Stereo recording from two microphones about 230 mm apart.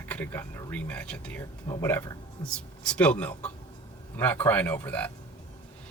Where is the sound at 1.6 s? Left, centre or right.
Centre.